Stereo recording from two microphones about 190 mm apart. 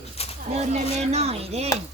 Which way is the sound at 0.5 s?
35° right (ahead or behind).